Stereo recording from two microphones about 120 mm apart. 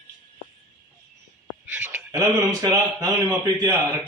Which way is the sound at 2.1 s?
30° right (ahead or behind).